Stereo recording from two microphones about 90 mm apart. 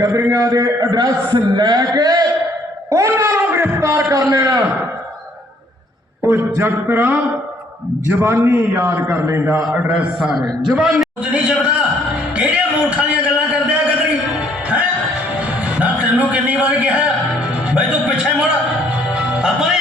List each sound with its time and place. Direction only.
0.0 s a man's voice: 40° right (ahead or behind)
2.9 s a sound: 40° right (ahead or behind)
3.2 s a sound: 30° right (ahead or behind)
6.6 s a man's voice: 25° right (ahead or behind)
9.7 s a man's voice: 15° right (ahead or behind)
11.3 s music: 10° right (ahead or behind)